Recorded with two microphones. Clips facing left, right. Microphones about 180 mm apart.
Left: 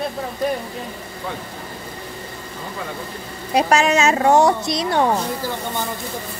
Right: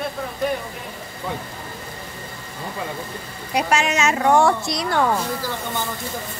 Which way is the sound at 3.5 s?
35° left (ahead or behind).